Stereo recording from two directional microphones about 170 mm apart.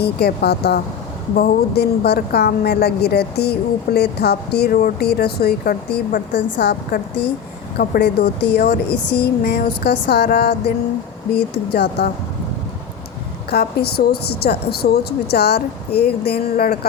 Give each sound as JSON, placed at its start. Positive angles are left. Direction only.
{"t": 0.0, "sound": "a woman's voice", "side_deg": 70}
{"t": 7.8, "sound": "a woman's voice", "side_deg": 70}
{"t": 11.7, "sound": "a woman's voice", "side_deg": 70}
{"t": 13.5, "sound": "a woman's voice", "side_deg": 70}